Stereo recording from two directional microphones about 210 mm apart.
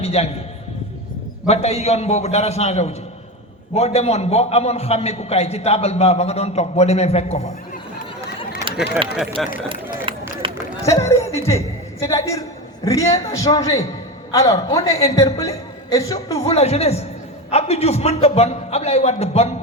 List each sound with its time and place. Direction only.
0.0 s a man's voice: 30° left (ahead or behind)
1.5 s a man's voice: 30° left (ahead or behind)
9.4 s speech: centre (ahead or behind)
10.1 s run: 25° right (ahead or behind)
10.8 s a man's voice: 15° left (ahead or behind)
16.4 s a man's voice: 30° left (ahead or behind)